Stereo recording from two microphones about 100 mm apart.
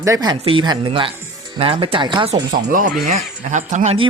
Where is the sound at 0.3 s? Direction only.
70° right (ahead or behind); by 2.6 s 50° right (ahead or behind).